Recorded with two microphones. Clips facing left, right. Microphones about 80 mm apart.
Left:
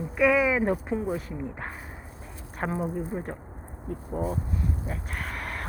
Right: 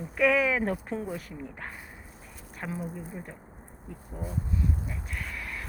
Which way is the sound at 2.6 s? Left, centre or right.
Left.